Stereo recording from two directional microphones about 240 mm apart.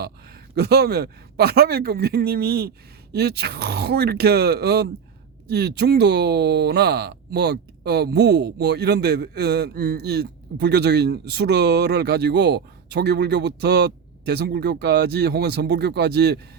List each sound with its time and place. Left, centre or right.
0.0 s speech: right